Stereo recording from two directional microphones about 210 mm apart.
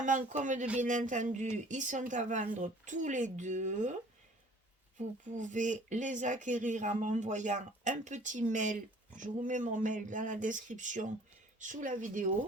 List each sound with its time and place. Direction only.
0.0 s speech: 35° right (ahead or behind)
4.9 s speech: 35° right (ahead or behind)